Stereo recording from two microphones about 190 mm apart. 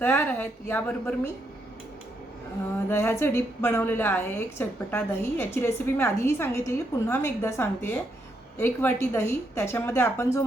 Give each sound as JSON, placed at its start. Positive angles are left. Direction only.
{"t": 0.0, "sound": "a woman's voice", "side_deg": 10}
{"t": 2.9, "sound": "a woman's voice", "side_deg": 15}